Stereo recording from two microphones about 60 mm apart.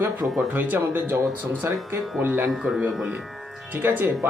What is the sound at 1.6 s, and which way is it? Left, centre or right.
Speech, right.